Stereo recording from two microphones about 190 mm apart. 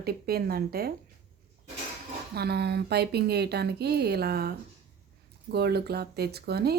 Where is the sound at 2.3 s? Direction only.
55° right (ahead or behind).